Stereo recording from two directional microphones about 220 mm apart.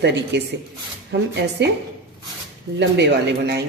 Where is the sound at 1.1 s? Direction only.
50° right (ahead or behind).